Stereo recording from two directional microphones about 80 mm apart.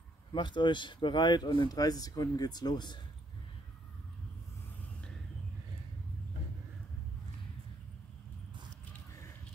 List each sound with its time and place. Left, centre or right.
0.3 s speech: left